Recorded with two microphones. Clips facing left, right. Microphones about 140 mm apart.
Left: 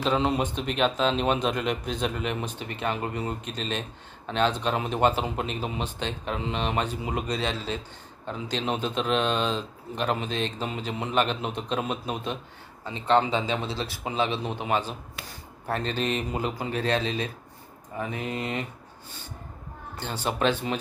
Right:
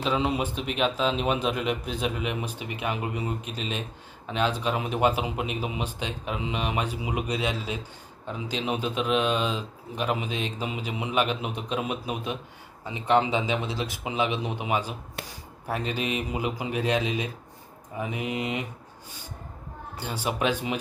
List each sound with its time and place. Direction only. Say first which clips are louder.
0.0 s a man's voice: left 1 dB; 5° right (ahead or behind)
15.2 s speech: right 3 dB; 60° right (ahead or behind)
15.6 s a man's voice: left 1 dB; 10° right (ahead or behind)
20.0 s a man's voice: left 1 dB; 10° right (ahead or behind)